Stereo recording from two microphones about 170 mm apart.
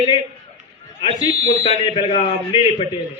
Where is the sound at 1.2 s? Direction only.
25° left (ahead or behind).